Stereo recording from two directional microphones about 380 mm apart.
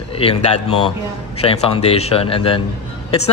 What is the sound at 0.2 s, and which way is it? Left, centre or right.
A man's voice, centre.